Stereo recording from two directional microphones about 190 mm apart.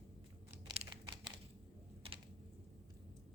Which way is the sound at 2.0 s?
30° right (ahead or behind).